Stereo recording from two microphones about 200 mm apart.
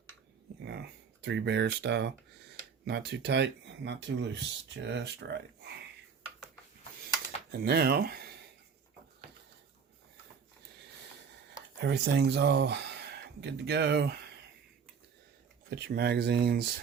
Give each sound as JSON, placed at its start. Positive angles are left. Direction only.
{"t": 0.6, "sound": "a sound", "side_deg": -60}
{"t": 2.8, "sound": "speech", "side_deg": -55}
{"t": 7.6, "sound": "speech", "side_deg": -50}
{"t": 11.8, "sound": "speech", "side_deg": -60}
{"t": 15.7, "sound": "speech", "side_deg": -55}